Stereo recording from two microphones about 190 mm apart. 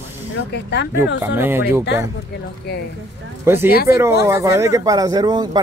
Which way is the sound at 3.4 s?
10° right (ahead or behind).